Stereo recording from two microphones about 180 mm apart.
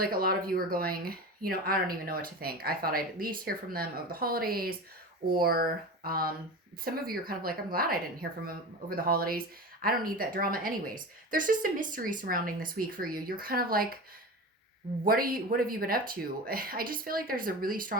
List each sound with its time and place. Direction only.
0.0 s a woman's voice: 55° right (ahead or behind)
15.0 s a woman's voice: 55° right (ahead or behind)